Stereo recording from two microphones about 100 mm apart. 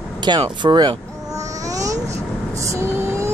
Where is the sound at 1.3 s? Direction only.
35° right (ahead or behind).